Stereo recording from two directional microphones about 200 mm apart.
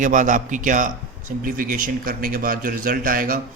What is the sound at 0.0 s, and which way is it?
A man's voice, 40° right (ahead or behind).